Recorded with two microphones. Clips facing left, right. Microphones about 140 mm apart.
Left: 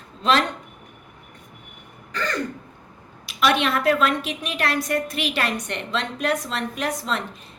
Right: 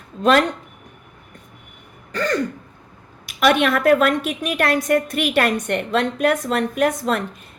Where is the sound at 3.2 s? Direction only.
50° right (ahead or behind).